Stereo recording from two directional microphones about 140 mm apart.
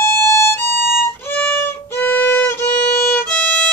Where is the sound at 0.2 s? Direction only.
20° left (ahead or behind).